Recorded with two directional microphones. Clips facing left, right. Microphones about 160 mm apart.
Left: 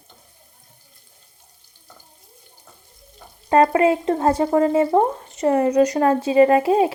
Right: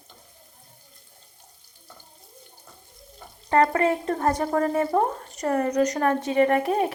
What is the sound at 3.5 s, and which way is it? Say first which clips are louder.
A woman's voice: left 5 dB; 20° left (ahead or behind).